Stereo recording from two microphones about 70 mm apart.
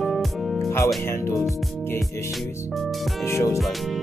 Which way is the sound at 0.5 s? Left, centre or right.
Left.